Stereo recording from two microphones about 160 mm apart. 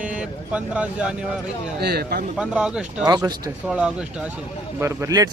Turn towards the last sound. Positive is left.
turn(degrees=-20)  # may be behind; listen again after turning